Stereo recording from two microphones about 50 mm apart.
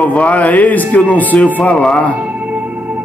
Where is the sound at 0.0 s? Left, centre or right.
Left.